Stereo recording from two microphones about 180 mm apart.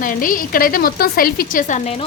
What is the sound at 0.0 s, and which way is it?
A woman's voice, 50° left (ahead or behind).